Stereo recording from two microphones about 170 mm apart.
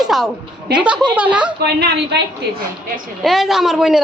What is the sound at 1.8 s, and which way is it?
Speech, 80° right.